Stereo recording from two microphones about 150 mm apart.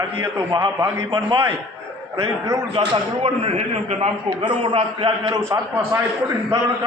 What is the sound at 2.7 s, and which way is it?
A man's voice, 40° right (ahead or behind).